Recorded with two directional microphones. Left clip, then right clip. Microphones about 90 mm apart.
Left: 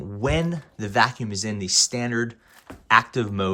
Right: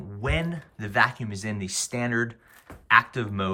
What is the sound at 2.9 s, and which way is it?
Speech, 25° left (ahead or behind).